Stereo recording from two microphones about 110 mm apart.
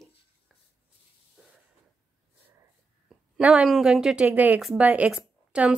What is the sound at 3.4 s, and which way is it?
Speech, 10° right (ahead or behind).